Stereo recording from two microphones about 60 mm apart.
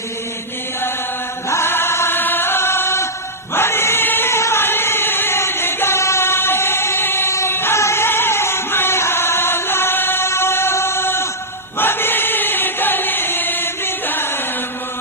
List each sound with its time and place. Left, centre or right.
1.5 s chant: left
7.8 s music: left
11.8 s choir: left